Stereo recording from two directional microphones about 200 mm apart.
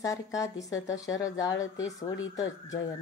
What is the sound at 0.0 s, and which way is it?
A woman's voice, 15° left (ahead or behind).